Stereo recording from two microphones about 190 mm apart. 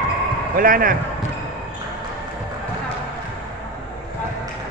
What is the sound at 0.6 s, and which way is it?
Speech, 50° right (ahead or behind).